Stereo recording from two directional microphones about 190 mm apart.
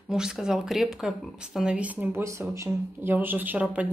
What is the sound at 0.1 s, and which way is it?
Speech, 5° right (ahead or behind).